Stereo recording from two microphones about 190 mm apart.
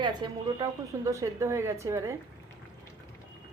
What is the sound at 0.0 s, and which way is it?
A woman's voice, 25° right (ahead or behind).